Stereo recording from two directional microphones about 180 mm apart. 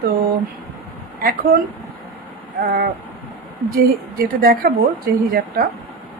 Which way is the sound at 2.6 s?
55° right (ahead or behind).